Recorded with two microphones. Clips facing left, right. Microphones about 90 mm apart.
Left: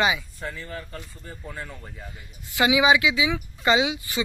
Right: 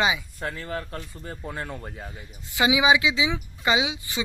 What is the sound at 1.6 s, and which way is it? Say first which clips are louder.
Speech: right 4 dB; 40° right (ahead or behind).